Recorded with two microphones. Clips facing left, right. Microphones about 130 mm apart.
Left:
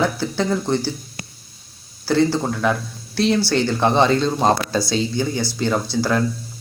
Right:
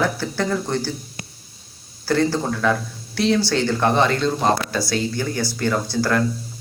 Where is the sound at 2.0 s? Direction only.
15° left (ahead or behind).